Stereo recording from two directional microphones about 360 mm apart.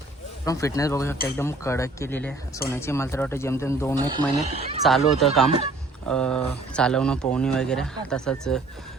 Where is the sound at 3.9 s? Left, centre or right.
Centre.